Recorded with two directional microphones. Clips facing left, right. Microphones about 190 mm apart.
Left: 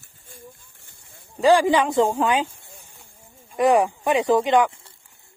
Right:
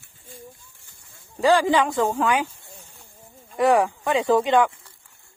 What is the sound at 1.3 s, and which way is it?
Speech, 15° left (ahead or behind).